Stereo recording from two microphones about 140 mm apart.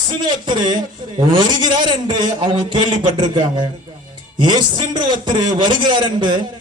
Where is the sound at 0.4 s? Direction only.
35° right (ahead or behind).